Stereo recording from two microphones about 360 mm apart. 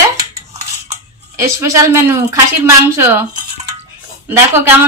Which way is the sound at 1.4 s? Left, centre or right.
Centre.